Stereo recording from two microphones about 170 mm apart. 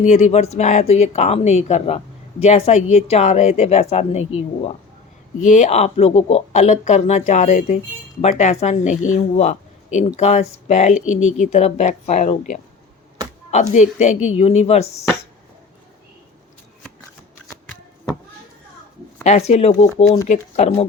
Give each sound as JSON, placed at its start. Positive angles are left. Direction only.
{"t": 0.0, "sound": "speech", "side_deg": 45}
{"t": 19.2, "sound": "speech", "side_deg": 40}